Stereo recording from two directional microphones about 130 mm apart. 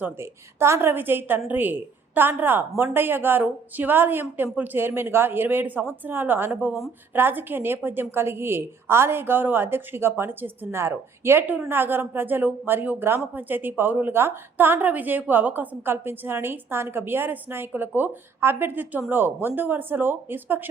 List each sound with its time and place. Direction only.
0.0 s a woman's voice: 20° right (ahead or behind)